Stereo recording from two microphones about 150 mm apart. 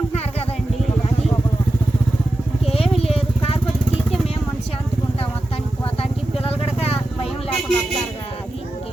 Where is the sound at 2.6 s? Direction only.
40° left (ahead or behind).